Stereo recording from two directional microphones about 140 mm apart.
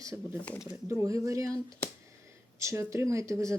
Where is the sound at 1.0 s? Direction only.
25° right (ahead or behind).